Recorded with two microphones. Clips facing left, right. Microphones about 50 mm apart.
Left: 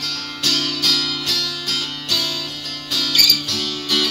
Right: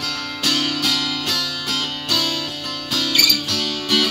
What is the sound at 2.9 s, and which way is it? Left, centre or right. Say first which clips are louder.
Music: even; centre.